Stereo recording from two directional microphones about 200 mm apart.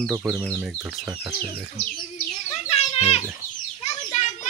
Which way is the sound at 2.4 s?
30° left (ahead or behind).